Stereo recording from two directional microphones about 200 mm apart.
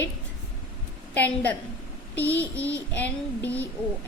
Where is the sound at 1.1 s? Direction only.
10° left (ahead or behind).